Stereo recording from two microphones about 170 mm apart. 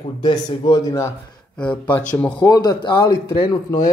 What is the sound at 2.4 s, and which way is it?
Speech, 25° left (ahead or behind).